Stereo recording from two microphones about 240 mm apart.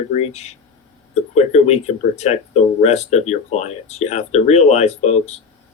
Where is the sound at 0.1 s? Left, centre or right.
Left.